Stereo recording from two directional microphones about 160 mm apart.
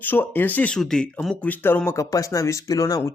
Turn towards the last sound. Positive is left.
turn(degrees=20)  # may be behind; listen again after turning